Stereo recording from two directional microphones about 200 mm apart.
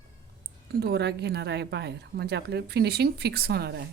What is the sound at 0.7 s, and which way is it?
A woman's voice, 55° right (ahead or behind).